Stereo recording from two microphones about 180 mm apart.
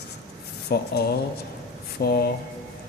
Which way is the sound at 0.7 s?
60° left (ahead or behind).